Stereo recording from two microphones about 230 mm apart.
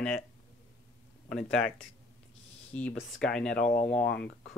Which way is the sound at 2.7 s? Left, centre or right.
Centre.